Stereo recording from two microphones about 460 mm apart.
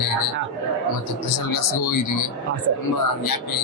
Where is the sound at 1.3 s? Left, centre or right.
Left.